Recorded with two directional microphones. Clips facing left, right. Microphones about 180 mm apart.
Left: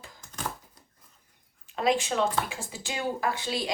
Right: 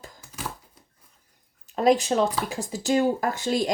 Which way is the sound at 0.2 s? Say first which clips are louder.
Left 1 dB; 5° right (ahead or behind).